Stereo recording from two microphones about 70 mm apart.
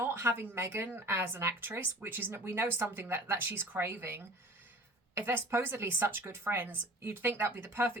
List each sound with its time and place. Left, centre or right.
0.0 s speech: right